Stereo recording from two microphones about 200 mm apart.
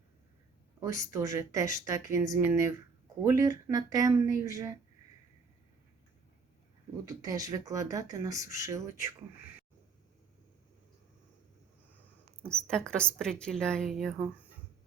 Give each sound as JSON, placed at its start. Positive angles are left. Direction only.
{"t": 0.8, "sound": "speech", "side_deg": -15}
{"t": 7.0, "sound": "speech", "side_deg": -15}
{"t": 12.5, "sound": "a woman's voice", "side_deg": 5}